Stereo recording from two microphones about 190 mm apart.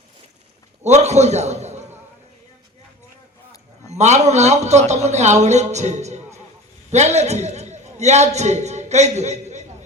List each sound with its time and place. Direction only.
0.8 s a man's voice: 35° right (ahead or behind)
3.9 s a man's voice: 35° right (ahead or behind)